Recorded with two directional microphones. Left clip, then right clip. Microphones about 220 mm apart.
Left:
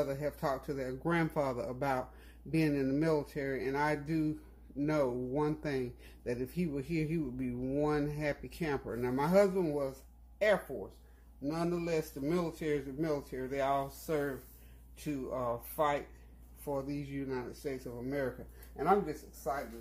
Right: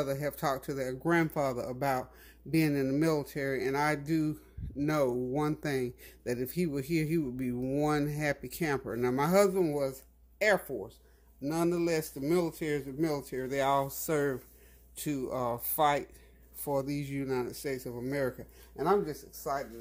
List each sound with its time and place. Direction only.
0.0 s speech: 35° right (ahead or behind); by 19.6 s 50° right (ahead or behind)